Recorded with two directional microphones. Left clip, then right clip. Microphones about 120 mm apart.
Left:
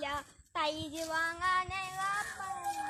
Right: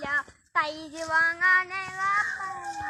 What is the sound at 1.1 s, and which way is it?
Child singing, 45° left (ahead or behind).